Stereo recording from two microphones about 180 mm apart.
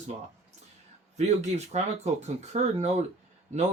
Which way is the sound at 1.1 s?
40° right (ahead or behind).